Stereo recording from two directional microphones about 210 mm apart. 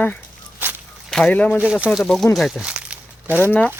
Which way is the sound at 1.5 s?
5° right (ahead or behind).